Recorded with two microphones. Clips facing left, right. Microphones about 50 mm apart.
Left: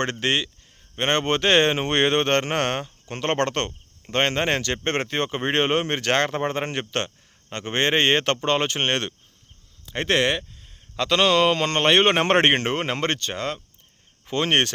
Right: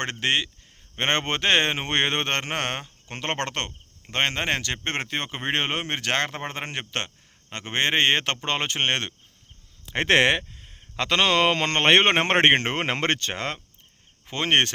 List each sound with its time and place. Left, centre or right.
0.0 s speech: right
0.9 s speech: right
9.8 s speech: right
10.6 s a man's voice: right
12.7 s speech: right
14.3 s speech: right